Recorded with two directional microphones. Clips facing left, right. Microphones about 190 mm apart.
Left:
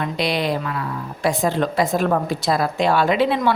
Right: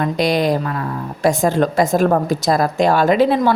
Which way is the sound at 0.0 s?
45° right (ahead or behind).